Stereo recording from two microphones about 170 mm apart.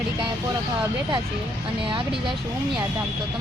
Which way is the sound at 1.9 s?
30° right (ahead or behind).